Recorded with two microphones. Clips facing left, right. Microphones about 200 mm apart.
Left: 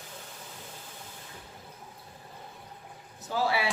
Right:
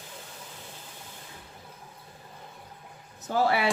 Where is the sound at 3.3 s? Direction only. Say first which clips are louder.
Right 4 dB; 55° right (ahead or behind).